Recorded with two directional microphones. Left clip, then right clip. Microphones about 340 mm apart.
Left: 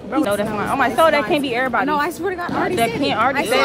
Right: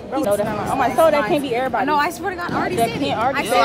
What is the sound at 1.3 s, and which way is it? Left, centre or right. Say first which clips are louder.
Speech: left 1 dB; left.